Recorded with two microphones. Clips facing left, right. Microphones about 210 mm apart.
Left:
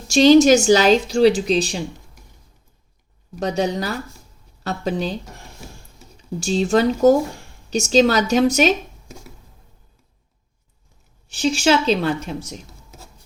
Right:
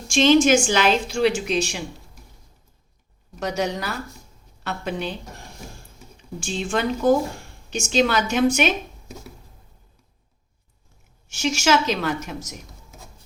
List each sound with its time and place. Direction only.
0.1 s a woman's voice: 40° left (ahead or behind)
3.4 s a woman's voice: 30° left (ahead or behind)
6.4 s a woman's voice: 40° left (ahead or behind)
11.3 s a woman's voice: 30° left (ahead or behind)